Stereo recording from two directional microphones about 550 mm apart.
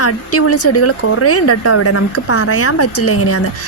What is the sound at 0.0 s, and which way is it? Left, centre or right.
Speech, left.